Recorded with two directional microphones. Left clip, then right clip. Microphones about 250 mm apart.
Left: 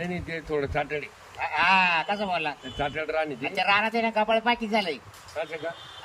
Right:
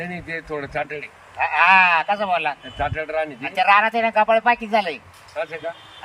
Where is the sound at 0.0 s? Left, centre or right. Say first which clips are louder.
Right 4 dB; centre.